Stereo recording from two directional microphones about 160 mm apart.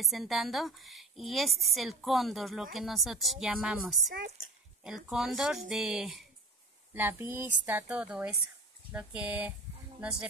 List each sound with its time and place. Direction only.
0.0 s a woman's voice: centre (ahead or behind)
4.1 s speech: 65° right (ahead or behind)
4.8 s a woman's voice: 5° right (ahead or behind)
6.9 s speech: 15° right (ahead or behind)